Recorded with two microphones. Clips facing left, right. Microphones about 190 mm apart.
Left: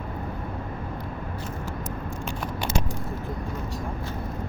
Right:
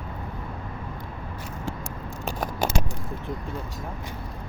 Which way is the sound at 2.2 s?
40° right (ahead or behind).